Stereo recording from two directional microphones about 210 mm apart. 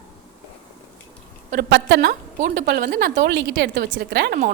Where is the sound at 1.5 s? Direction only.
45° right (ahead or behind).